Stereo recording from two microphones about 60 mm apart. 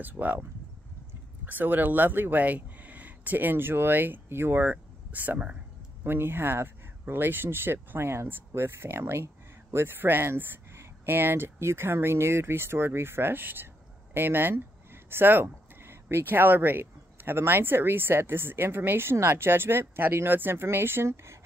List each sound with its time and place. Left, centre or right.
0.0 s speech: right
1.4 s speech: right
6.0 s speech: right